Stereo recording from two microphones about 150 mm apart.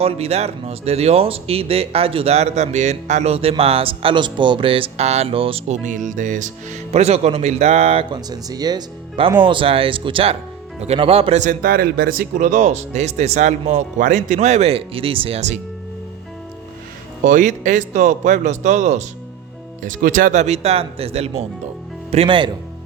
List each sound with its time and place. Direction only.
0.0 s speech: 40° right (ahead or behind)
8.1 s speech: 25° right (ahead or behind); by 11.5 s 45° right (ahead or behind)
11.6 s speech: 85° right; by 15.5 s 45° right (ahead or behind)
17.2 s speech: 55° right (ahead or behind)
19.8 s speech: 60° right (ahead or behind); by 22.5 s 35° right (ahead or behind)